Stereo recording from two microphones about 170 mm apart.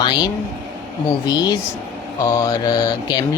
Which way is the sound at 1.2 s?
20° left (ahead or behind).